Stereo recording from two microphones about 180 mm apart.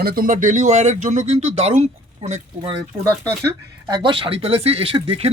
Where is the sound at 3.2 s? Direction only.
20° right (ahead or behind).